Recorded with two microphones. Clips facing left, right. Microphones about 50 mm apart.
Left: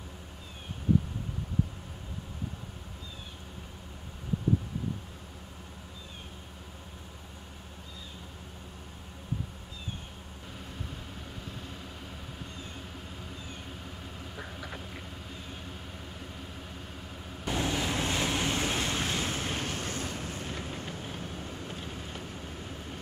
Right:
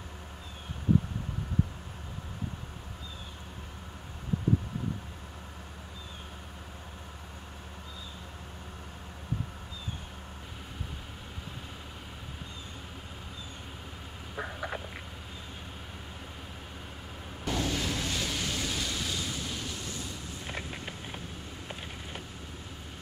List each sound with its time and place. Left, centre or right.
14.3 s frog: right
17.5 s vehicle: left
20.4 s vehicle: right